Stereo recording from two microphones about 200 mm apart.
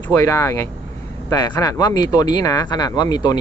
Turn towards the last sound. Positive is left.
turn(degrees=20)  # may be behind; listen again after turning